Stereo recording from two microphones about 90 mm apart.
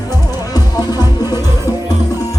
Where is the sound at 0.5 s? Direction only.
45° left (ahead or behind).